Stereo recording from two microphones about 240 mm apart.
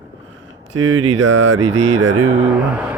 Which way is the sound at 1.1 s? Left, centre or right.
Right.